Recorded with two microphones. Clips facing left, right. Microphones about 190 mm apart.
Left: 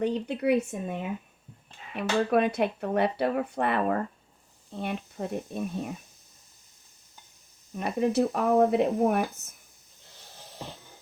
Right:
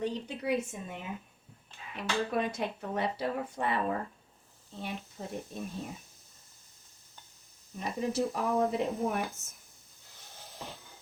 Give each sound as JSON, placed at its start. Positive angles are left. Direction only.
{"t": 0.0, "sound": "speech", "side_deg": 65}
{"t": 2.0, "sound": "speech", "side_deg": 65}
{"t": 7.8, "sound": "speech", "side_deg": 65}